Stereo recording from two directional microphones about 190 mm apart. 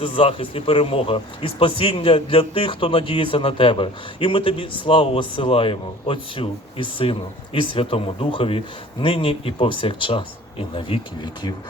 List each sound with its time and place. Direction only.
0.0 s speech: 30° left (ahead or behind)